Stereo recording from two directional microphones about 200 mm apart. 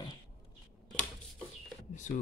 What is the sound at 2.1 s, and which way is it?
Speech, 40° left (ahead or behind).